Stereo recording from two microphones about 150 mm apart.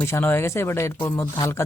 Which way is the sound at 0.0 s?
15° left (ahead or behind).